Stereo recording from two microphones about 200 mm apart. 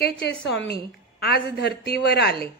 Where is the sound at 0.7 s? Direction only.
55° left (ahead or behind).